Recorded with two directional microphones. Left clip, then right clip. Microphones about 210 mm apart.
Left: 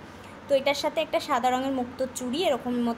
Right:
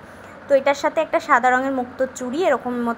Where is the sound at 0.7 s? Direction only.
15° right (ahead or behind).